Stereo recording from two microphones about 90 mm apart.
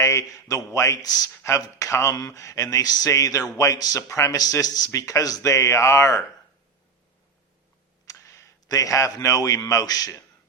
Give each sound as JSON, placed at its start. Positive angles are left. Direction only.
{"t": 0.0, "sound": "speech", "side_deg": 35}
{"t": 1.4, "sound": "speech", "side_deg": 35}
{"t": 8.0, "sound": "a sound", "side_deg": 35}
{"t": 8.6, "sound": "speech", "side_deg": 40}